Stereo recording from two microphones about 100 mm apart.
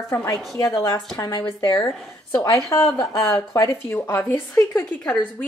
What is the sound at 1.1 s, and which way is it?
Speech, 40° left (ahead or behind).